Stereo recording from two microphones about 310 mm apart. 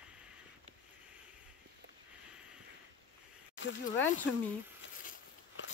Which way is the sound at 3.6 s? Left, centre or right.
Left.